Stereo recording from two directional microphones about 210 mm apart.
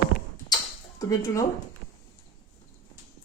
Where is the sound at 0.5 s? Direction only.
15° left (ahead or behind).